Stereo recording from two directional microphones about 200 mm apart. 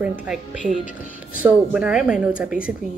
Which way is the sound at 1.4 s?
5° right (ahead or behind).